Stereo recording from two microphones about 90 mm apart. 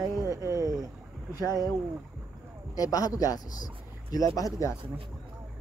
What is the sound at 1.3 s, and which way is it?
Speech, 45° left (ahead or behind).